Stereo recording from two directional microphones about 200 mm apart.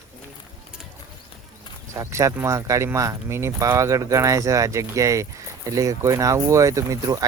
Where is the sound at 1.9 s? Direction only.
15° right (ahead or behind).